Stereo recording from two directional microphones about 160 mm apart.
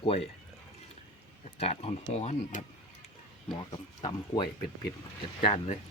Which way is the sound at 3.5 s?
30° left (ahead or behind).